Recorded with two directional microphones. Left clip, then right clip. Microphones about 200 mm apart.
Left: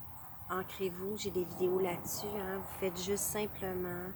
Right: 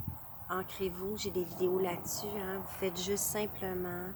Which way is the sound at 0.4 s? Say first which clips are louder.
Right 1 dB; 5° right (ahead or behind).